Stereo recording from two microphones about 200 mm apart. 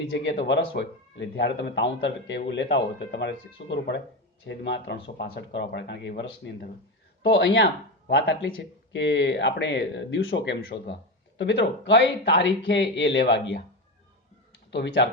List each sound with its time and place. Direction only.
0.1 s speech: 60° left (ahead or behind)
14.7 s speech: 60° left (ahead or behind)